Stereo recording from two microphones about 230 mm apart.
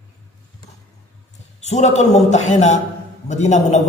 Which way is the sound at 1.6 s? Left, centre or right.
Left.